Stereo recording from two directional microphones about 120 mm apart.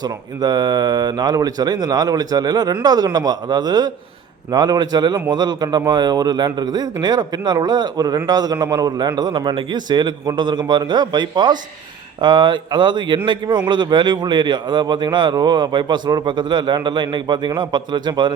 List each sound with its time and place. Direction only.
0.0 s a man's voice: 35° right (ahead or behind)